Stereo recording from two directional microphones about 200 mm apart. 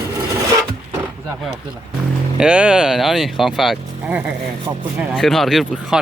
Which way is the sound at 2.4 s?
5° right (ahead or behind).